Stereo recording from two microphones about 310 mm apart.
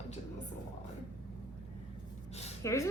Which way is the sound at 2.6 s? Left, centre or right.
Centre.